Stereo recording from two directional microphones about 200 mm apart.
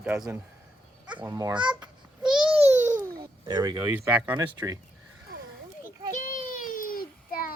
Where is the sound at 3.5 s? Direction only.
20° right (ahead or behind).